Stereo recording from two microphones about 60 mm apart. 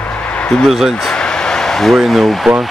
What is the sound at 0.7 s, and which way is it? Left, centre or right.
Speech, centre.